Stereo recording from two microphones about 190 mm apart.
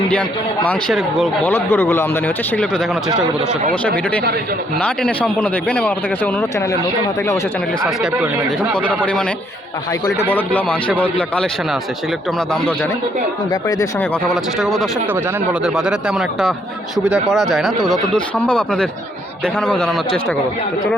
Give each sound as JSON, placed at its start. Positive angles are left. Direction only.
{"t": 0.1, "sound": "a man's voice", "side_deg": 5}
{"t": 1.5, "sound": "speech", "side_deg": 10}
{"t": 4.8, "sound": "a man's voice", "side_deg": 5}
{"t": 7.9, "sound": "a man's voice", "side_deg": -5}
{"t": 10.2, "sound": "speech", "side_deg": 10}
{"t": 13.5, "sound": "speech", "side_deg": 20}
{"t": 14.6, "sound": "a man's voice", "side_deg": 0}